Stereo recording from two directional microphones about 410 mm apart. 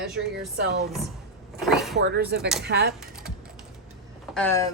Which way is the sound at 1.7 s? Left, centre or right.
Centre.